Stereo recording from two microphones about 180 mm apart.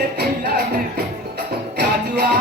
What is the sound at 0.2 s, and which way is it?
Music, 60° right (ahead or behind).